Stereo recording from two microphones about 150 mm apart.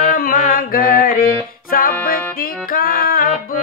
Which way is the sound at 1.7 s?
70° left (ahead or behind).